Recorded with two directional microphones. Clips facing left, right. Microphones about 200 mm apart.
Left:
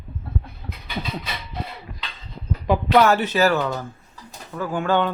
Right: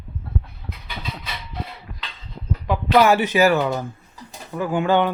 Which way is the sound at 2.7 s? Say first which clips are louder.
Even; 5° right (ahead or behind).